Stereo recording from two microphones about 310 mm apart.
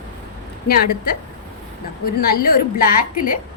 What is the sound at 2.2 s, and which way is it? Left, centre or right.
A woman's voice, left.